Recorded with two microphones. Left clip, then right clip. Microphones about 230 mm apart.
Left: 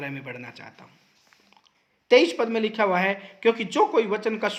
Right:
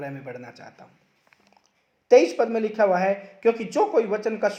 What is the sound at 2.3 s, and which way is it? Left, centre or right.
Speech, left.